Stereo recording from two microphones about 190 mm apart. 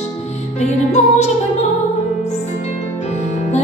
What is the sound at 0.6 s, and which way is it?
Music, 35° left (ahead or behind).